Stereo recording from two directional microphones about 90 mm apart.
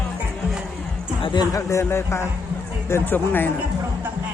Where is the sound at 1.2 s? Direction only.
55° left (ahead or behind).